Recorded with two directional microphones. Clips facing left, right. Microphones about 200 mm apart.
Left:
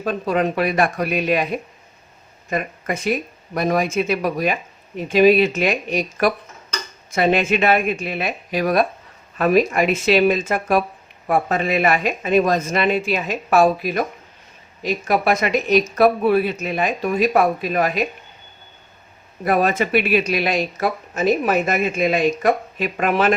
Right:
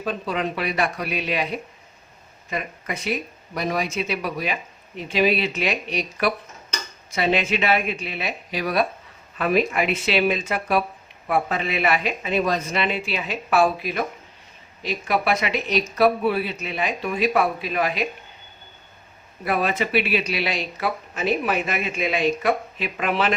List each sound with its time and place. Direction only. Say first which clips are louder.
0.0 s speech: left 6 dB; 45° left (ahead or behind)
2.5 s speech: left 6 dB; 50° left (ahead or behind)
19.5 s speech: left 5 dB; 45° left (ahead or behind)